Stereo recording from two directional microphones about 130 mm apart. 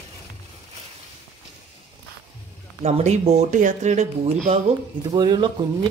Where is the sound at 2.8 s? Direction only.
60° right (ahead or behind).